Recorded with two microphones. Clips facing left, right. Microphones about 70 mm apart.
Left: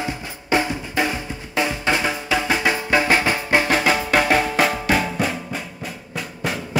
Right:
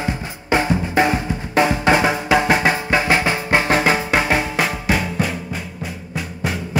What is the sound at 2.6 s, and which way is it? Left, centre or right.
Music, right.